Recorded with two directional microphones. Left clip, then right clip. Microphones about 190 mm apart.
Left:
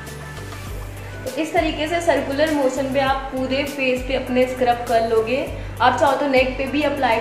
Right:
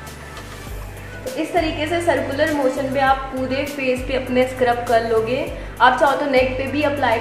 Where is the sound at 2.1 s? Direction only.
5° right (ahead or behind).